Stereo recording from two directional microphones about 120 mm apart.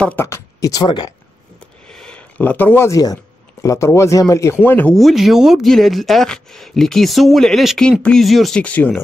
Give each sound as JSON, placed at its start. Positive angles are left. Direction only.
{"t": 0.0, "sound": "speech", "side_deg": 20}
{"t": 2.0, "sound": "a sound", "side_deg": 10}
{"t": 3.6, "sound": "speech", "side_deg": 25}
{"t": 4.9, "sound": "speech", "side_deg": 0}